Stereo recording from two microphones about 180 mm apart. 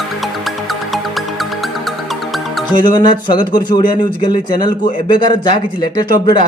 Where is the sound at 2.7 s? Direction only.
25° left (ahead or behind).